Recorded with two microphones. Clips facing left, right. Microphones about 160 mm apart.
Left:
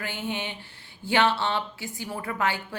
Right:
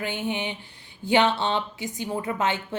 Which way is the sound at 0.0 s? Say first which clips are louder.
Right 4 dB; 20° right (ahead or behind).